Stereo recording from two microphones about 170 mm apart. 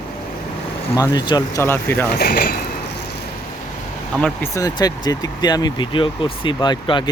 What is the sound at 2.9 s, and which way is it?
Vehicle, 75° left (ahead or behind).